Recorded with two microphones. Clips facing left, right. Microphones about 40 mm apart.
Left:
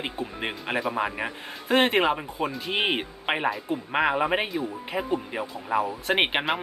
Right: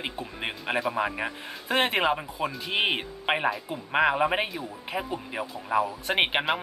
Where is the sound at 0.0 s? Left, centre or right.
Centre.